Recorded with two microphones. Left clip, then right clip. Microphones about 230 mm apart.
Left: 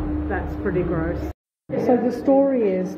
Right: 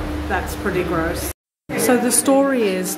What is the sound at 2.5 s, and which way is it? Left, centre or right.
Speech, centre.